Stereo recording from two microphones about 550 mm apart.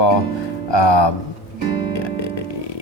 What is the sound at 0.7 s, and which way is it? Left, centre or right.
Speech, left.